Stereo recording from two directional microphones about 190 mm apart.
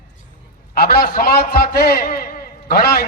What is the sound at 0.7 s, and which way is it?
A man's voice, 50° left (ahead or behind).